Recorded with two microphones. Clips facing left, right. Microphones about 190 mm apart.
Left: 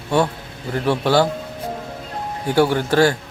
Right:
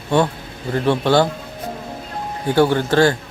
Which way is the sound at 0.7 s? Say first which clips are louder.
Right 1 dB; 5° left (ahead or behind).